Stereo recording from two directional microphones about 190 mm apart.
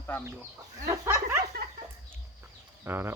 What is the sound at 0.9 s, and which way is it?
Dog, 15° right (ahead or behind).